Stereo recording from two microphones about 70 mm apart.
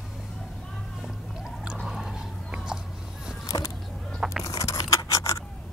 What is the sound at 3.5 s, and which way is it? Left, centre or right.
Vehicle, left.